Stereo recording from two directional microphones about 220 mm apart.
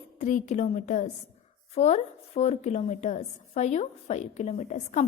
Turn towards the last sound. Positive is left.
turn(degrees=30)  # may be behind; listen again after turning